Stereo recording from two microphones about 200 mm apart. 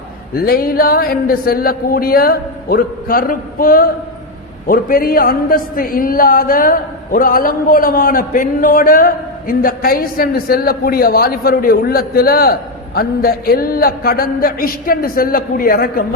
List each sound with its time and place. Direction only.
0.4 s speech: 50° left (ahead or behind)